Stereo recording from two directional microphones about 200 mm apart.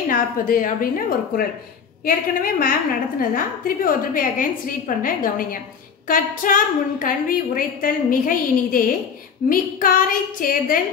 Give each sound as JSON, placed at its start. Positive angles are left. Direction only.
{"t": 0.1, "sound": "a woman's voice", "side_deg": 45}